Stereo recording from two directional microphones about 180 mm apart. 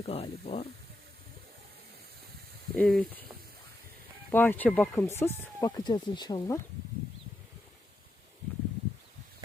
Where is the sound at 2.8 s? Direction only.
5° left (ahead or behind).